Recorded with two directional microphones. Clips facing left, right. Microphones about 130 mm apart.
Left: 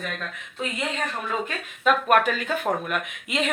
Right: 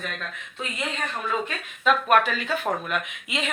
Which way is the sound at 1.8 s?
45° left (ahead or behind).